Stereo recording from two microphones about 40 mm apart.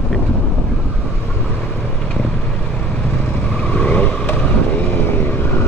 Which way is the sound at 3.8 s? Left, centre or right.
Left.